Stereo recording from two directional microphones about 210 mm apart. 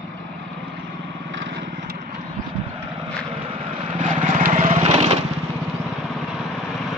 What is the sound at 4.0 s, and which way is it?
Lawn mower, 35° right (ahead or behind).